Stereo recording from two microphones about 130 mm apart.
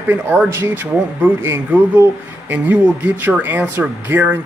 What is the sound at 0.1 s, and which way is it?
A man's voice, 15° right (ahead or behind).